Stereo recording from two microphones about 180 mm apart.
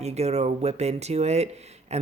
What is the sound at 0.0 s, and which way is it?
Speech, 35° right (ahead or behind).